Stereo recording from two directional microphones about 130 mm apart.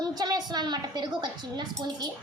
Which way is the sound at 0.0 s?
30° right (ahead or behind).